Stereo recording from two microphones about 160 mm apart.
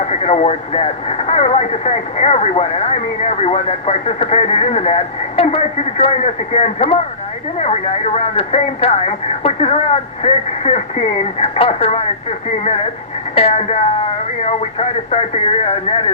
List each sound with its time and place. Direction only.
0.1 s speech: 45° left (ahead or behind)
13.3 s speech: 40° left (ahead or behind)